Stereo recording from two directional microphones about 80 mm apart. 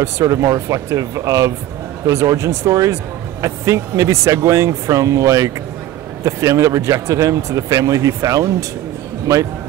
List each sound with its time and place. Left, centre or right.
0.0 s speech: right